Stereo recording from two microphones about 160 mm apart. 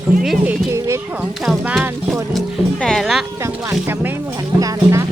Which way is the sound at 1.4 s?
5° right (ahead or behind).